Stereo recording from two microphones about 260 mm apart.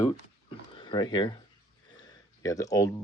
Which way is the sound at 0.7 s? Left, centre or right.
Centre.